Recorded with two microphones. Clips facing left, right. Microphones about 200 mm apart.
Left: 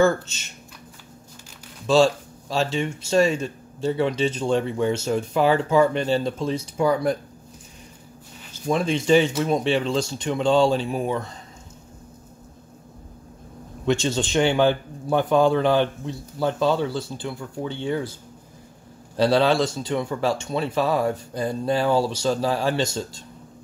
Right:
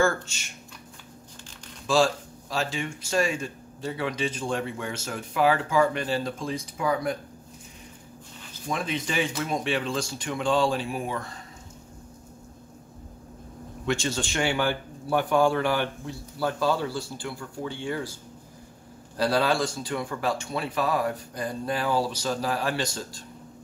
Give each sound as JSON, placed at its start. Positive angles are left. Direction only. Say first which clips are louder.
{"t": 0.0, "sound": "speech", "louder": "left 5 dB", "side_deg": 20}
{"t": 2.5, "sound": "speech", "louder": "left 6 dB", "side_deg": 25}
{"t": 8.7, "sound": "speech", "louder": "left 10 dB", "side_deg": 30}
{"t": 13.8, "sound": "speech", "louder": "left 5 dB", "side_deg": 20}
{"t": 19.1, "sound": "speech", "louder": "left 5 dB", "side_deg": 25}